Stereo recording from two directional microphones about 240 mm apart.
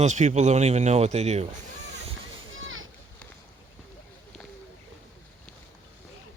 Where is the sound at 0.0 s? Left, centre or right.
Right.